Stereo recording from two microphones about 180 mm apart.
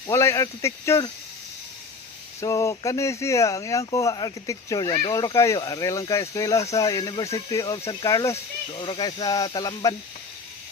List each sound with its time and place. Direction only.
0.1 s speech: 15° left (ahead or behind)
2.4 s speech: 15° left (ahead or behind)